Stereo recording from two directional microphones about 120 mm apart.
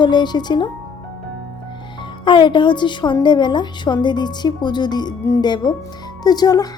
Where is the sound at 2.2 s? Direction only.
40° left (ahead or behind).